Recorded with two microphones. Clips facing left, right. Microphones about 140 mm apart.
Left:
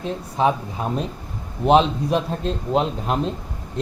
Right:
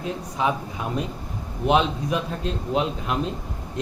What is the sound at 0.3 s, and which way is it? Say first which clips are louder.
A man's voice: left 5 dB; 35° left (ahead or behind).